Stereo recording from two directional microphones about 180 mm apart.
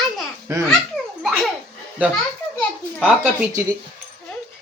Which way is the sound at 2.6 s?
Centre (ahead or behind).